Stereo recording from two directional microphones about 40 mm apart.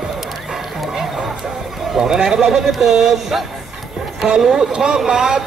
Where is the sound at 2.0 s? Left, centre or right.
Centre.